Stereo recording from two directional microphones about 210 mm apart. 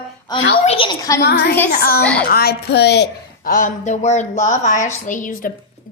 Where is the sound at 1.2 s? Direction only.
50° left (ahead or behind).